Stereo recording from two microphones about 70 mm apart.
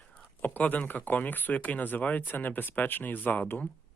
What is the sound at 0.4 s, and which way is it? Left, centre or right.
Speech, left.